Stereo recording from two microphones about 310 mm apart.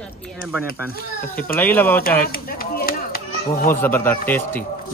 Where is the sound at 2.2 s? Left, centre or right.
Left.